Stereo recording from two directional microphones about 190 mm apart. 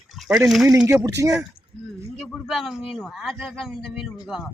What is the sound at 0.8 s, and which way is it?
Speech, 15° right (ahead or behind).